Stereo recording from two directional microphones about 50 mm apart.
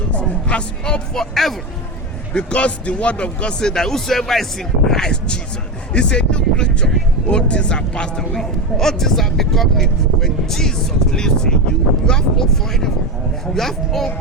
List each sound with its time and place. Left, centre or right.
0.1 s speech: left; by 1.5 s centre
2.3 s speech: left
3.6 s speech: centre